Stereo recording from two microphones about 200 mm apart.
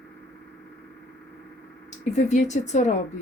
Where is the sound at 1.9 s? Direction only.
35° left (ahead or behind).